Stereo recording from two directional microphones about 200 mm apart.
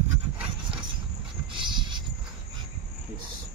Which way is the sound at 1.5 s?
25° right (ahead or behind).